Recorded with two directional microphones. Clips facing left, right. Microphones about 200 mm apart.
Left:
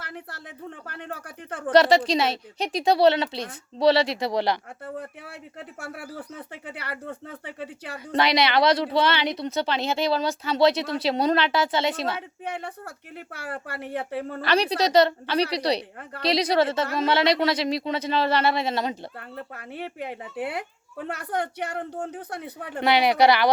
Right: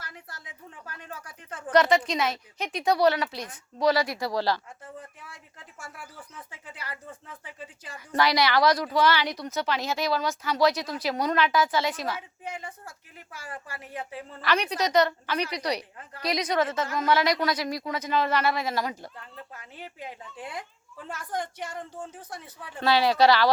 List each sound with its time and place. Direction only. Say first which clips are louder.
0.0 s a woman's voice: left 7 dB; 60° left (ahead or behind)
1.7 s a woman's voice: left 4 dB; 30° left (ahead or behind)
4.9 s speech: left 8 dB; 65° left (ahead or behind)
7.9 s a woman's voice: left 2 dB; 25° left (ahead or behind)
12.1 s a woman's voice: left 4 dB; 65° left (ahead or behind)
14.4 s a woman's voice: left 3 dB; 35° left (ahead or behind)
19.5 s a woman's voice: left 9 dB; 65° left (ahead or behind)
22.8 s speech: left 2 dB; 15° left (ahead or behind)